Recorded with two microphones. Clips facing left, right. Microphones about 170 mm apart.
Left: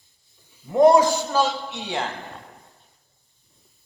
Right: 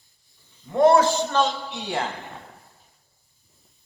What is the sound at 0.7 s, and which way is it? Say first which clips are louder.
A man's voice: left 2 dB; 15° left (ahead or behind).